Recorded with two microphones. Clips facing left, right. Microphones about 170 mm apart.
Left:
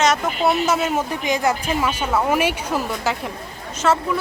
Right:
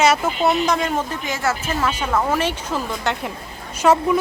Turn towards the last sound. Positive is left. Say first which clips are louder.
# right 3 dB
turn(degrees=-15)  # may be behind; listen again after turning